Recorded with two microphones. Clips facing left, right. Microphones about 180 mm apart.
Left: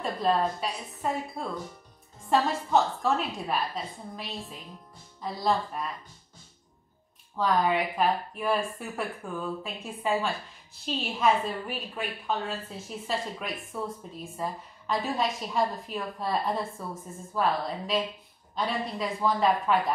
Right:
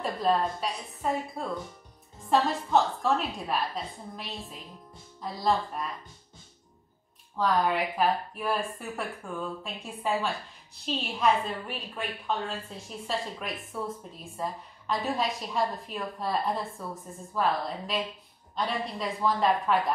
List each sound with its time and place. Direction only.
0.0 s a woman's voice: centre (ahead or behind)
7.3 s a woman's voice: centre (ahead or behind)